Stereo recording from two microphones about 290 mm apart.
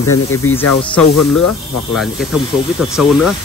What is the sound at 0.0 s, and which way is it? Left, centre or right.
Speech, left.